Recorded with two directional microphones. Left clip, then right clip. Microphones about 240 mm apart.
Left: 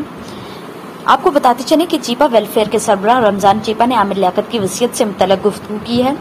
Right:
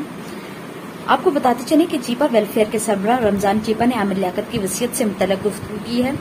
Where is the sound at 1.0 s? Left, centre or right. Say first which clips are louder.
Left 6 dB; centre.